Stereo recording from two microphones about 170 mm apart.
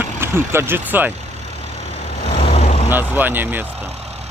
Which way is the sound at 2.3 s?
35° left (ahead or behind).